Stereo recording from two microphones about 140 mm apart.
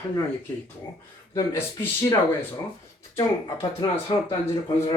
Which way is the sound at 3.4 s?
30° left (ahead or behind).